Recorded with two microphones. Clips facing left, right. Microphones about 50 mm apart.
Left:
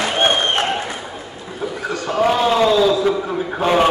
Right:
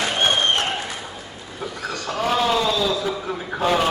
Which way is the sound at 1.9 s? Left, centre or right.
Left.